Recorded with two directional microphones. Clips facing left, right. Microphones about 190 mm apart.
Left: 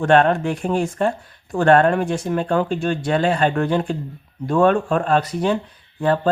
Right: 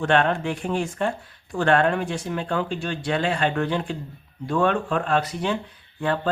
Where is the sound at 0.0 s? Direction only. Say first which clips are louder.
Left 5 dB; 45° left (ahead or behind).